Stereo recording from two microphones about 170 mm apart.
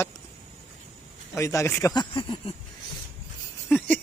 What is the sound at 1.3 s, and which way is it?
A man's voice, 15° left (ahead or behind).